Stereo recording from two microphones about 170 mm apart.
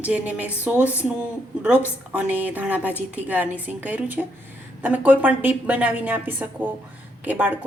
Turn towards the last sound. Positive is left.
turn(degrees=-10)  # may be behind; listen again after turning